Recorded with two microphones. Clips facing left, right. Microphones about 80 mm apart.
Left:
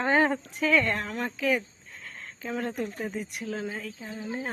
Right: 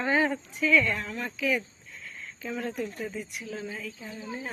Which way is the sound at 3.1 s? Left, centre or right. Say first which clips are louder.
Left 3 dB; left.